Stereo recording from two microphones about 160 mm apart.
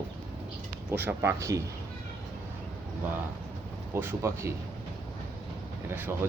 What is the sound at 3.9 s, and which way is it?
Speech, 15° right (ahead or behind).